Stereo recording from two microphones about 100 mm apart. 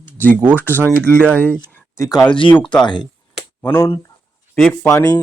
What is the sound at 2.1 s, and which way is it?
Speech, 40° left (ahead or behind).